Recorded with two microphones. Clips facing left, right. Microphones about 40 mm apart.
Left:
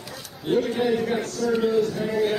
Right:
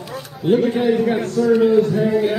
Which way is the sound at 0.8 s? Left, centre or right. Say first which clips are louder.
Right 6 dB; centre.